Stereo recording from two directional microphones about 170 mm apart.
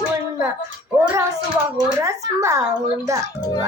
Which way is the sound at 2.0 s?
20° right (ahead or behind).